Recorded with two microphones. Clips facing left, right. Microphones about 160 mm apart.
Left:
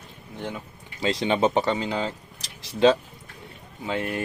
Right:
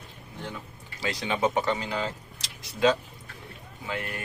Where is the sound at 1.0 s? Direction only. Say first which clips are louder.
Left 5 dB; 25° left (ahead or behind).